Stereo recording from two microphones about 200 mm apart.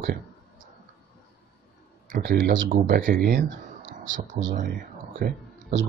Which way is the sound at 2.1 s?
55° right (ahead or behind).